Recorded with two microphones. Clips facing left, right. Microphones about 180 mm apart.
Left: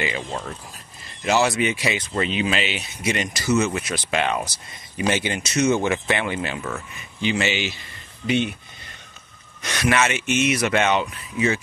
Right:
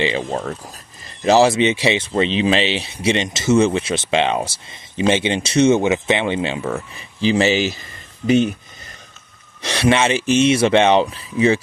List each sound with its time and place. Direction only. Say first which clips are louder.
0.2 s speech: right 7 dB; 50° right (ahead or behind)
1.0 s speech: right 7 dB; 35° right (ahead or behind)
5.8 s speech: right 5 dB; 20° right (ahead or behind); by 8.5 s 40° right (ahead or behind)
9.6 s speech: right 5 dB; 30° right (ahead or behind)